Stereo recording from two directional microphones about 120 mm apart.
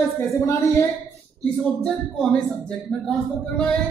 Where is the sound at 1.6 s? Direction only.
5° left (ahead or behind).